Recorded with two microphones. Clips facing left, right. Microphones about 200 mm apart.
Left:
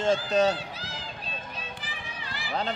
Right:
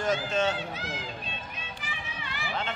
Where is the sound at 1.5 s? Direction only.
35° left (ahead or behind).